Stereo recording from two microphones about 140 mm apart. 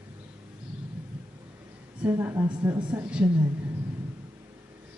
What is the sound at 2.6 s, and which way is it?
Speech, 30° right (ahead or behind).